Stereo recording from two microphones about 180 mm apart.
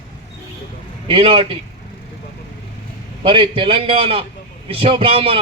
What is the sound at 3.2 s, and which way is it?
A man's voice, 30° right (ahead or behind).